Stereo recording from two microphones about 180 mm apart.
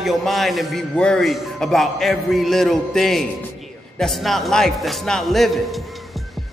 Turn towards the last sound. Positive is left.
turn(degrees=0)  # may be behind; listen again after turning